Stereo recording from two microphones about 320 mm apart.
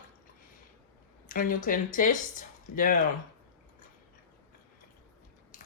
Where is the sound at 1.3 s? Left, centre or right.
Left.